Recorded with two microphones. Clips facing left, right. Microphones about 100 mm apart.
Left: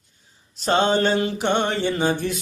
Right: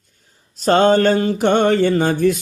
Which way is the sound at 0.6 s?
45° right (ahead or behind).